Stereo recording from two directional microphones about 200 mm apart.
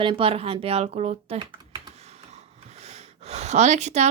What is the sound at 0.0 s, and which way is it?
Speech, 25° right (ahead or behind).